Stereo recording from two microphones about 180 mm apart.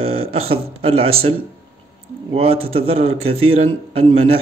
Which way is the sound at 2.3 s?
35° right (ahead or behind).